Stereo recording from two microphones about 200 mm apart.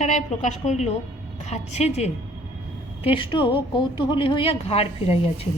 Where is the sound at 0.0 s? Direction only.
35° left (ahead or behind).